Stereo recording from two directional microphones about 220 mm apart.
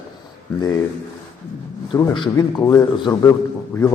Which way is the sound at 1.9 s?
20° left (ahead or behind).